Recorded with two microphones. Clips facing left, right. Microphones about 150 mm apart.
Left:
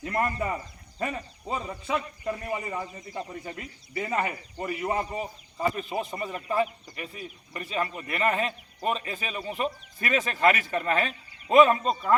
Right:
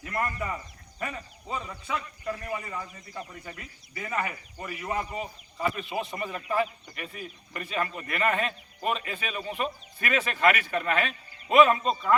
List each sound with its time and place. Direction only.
0.0 s a man's voice: 30° left (ahead or behind)
6.3 s a man's voice: 15° left (ahead or behind)